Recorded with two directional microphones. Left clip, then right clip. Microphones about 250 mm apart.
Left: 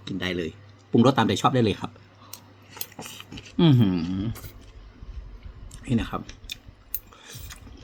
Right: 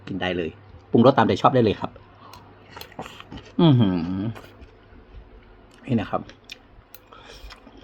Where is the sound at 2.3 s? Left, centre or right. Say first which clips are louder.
Right 1 dB; centre.